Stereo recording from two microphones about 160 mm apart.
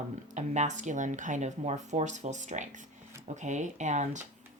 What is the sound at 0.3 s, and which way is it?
Speech, 45° right (ahead or behind).